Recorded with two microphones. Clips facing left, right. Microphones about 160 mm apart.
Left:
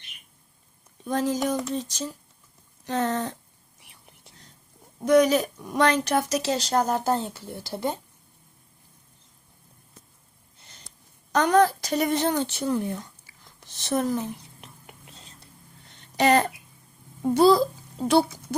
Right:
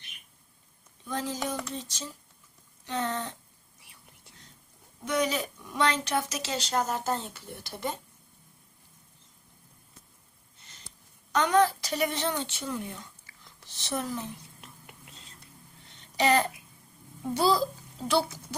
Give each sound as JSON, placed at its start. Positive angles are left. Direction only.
{"t": 1.0, "sound": "a woman's voice", "side_deg": 45}
{"t": 5.0, "sound": "speech", "side_deg": 45}
{"t": 11.3, "sound": "a woman's voice", "side_deg": 40}
{"t": 16.1, "sound": "a woman's voice", "side_deg": 50}